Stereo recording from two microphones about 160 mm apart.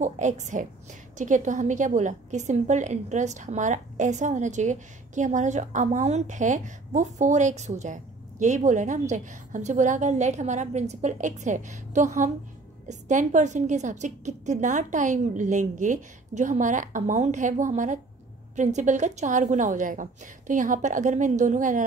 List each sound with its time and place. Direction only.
0.0 s a woman's voice: 50° right (ahead or behind)